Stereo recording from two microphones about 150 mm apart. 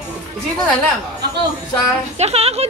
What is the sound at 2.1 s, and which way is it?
Speech, 45° right (ahead or behind).